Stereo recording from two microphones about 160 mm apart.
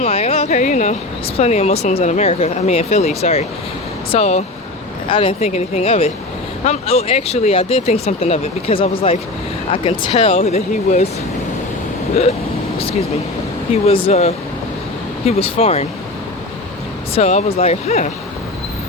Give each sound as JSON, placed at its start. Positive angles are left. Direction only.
{"t": 0.0, "sound": "speech", "side_deg": 40}
{"t": 13.8, "sound": "speech", "side_deg": 35}
{"t": 17.2, "sound": "speech", "side_deg": 40}